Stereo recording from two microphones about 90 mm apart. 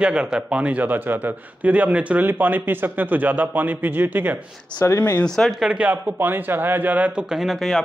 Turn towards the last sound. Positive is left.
turn(degrees=5)  # may be behind; listen again after turning